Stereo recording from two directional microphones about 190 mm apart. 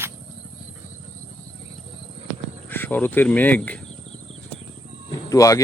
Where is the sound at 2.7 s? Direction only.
10° left (ahead or behind).